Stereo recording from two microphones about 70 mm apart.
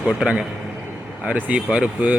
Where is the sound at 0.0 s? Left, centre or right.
Centre.